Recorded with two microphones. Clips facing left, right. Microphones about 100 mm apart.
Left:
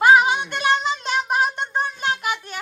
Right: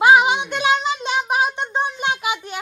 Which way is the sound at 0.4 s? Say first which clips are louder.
Right 2 dB; 10° right (ahead or behind).